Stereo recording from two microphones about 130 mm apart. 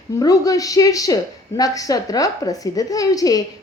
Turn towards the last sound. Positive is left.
turn(degrees=30)  # may be behind; listen again after turning